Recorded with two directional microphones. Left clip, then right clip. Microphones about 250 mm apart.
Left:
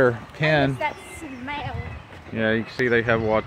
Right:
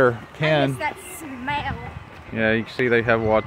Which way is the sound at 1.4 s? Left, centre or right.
Right.